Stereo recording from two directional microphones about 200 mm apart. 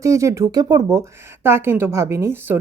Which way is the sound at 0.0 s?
15° right (ahead or behind).